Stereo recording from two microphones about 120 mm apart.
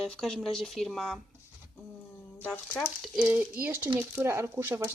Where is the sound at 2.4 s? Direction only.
15° left (ahead or behind).